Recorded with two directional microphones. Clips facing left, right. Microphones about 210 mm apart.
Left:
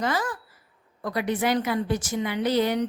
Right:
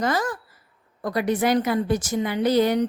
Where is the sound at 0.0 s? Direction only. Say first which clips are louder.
Right 3 dB; 45° right (ahead or behind).